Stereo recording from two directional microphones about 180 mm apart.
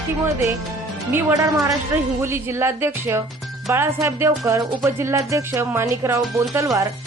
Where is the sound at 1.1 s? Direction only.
10° right (ahead or behind).